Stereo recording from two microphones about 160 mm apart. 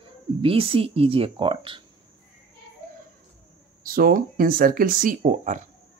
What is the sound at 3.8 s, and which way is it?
Speech, 60° right (ahead or behind).